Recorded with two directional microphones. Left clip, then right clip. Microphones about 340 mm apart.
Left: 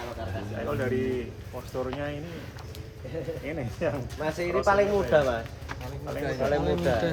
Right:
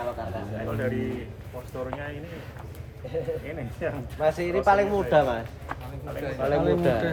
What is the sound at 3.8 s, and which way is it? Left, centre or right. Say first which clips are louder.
Speech: left 2 dB; left.